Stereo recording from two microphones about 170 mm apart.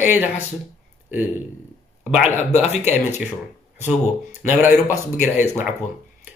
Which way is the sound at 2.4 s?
40° left (ahead or behind).